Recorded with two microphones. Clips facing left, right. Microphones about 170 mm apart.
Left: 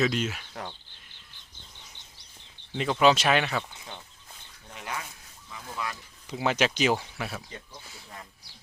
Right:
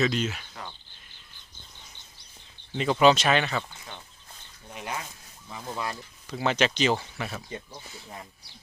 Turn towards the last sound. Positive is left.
turn(degrees=5)  # may be behind; listen again after turning